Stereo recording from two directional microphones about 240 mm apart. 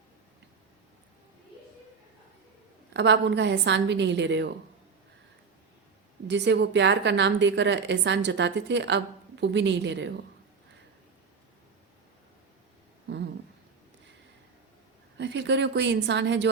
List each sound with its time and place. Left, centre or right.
2.9 s a woman's voice: right
6.2 s a woman's voice: right
15.2 s a woman's voice: right